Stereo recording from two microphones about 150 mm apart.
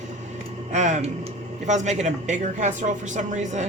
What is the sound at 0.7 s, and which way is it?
Speech, 50° right (ahead or behind).